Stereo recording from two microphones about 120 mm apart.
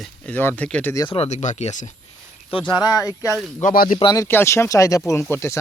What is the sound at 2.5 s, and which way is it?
Speech, 40° left (ahead or behind).